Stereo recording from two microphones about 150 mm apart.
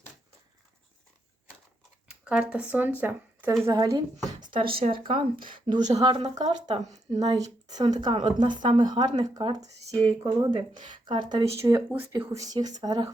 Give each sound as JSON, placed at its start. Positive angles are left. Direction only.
{"t": 2.0, "sound": "speech", "side_deg": -5}
{"t": 11.4, "sound": "speech", "side_deg": -20}